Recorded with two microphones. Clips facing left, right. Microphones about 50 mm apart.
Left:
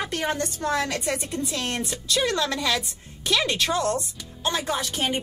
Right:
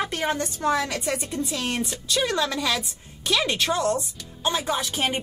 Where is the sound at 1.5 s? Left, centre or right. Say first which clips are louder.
Right 1 dB; centre.